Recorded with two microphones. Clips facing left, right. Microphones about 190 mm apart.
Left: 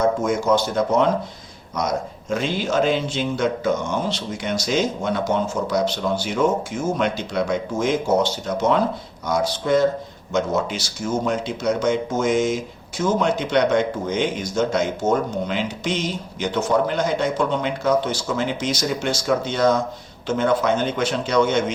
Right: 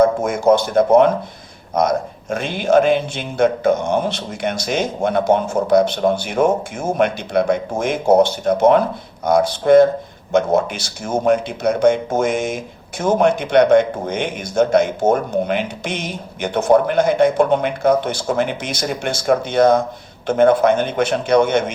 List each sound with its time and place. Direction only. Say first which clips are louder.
0.2 s speech: right 4 dB; 55° right (ahead or behind)